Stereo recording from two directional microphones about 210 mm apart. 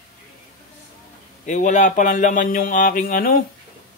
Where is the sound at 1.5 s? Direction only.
35° left (ahead or behind).